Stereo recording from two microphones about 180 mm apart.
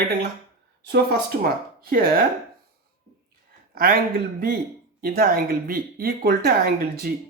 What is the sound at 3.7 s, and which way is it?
Speech, 55° right (ahead or behind).